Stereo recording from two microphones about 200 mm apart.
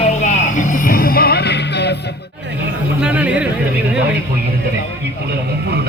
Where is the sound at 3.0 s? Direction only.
5° right (ahead or behind).